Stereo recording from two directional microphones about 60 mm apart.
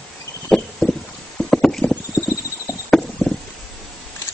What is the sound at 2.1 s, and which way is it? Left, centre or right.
Horse, left.